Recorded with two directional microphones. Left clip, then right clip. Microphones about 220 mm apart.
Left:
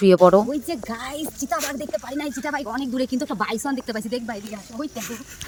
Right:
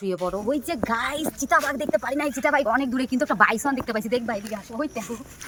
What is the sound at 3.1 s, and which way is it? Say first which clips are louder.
Speech: right 4 dB; 15° right (ahead or behind).